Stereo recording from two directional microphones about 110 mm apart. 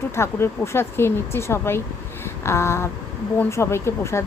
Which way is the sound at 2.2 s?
25° left (ahead or behind).